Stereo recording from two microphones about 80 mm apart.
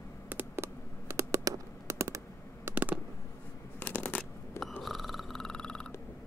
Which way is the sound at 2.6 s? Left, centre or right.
Right.